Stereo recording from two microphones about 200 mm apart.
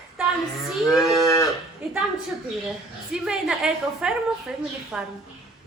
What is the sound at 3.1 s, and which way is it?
A woman's voice, 5° right (ahead or behind).